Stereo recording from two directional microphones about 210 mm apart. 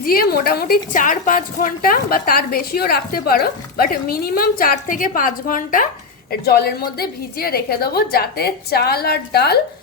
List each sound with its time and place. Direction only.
0.0 s a woman's voice: 45° left (ahead or behind)